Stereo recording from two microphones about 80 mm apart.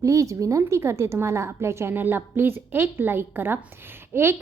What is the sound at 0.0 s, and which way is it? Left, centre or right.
A woman's voice, right.